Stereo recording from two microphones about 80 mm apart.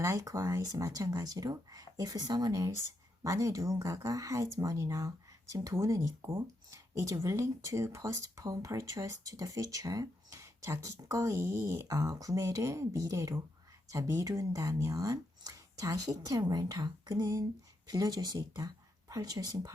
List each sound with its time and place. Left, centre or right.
0.0 s speech: right
18.3 s speech: right